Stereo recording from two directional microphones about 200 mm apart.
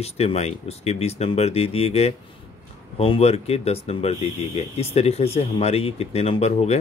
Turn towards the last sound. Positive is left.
turn(degrees=30)  # may be behind; listen again after turning